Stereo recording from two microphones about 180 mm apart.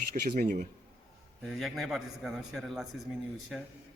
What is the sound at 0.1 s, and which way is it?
Speech, 50° right (ahead or behind).